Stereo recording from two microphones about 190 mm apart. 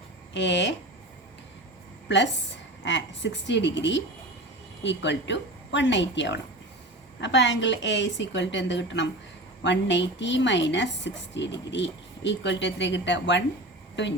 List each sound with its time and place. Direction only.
0.3 s a woman's voice: 70° left (ahead or behind)
2.0 s a woman's voice: 70° left (ahead or behind)